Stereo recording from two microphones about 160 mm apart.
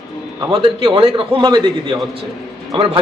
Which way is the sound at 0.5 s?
35° right (ahead or behind).